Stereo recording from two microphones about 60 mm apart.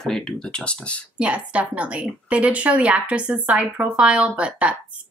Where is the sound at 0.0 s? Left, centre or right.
Centre.